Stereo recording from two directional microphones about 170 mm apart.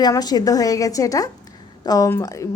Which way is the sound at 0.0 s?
25° left (ahead or behind).